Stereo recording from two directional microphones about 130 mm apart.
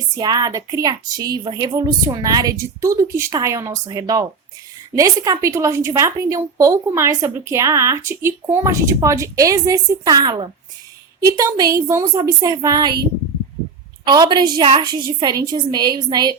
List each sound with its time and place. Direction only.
0.2 s a woman's voice: 30° right (ahead or behind)
14.0 s a woman's voice: 35° right (ahead or behind)